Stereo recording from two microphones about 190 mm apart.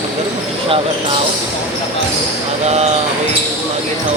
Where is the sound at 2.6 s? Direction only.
35° right (ahead or behind).